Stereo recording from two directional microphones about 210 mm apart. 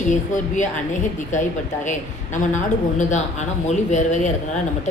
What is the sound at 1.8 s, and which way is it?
A woman's voice, 35° left (ahead or behind).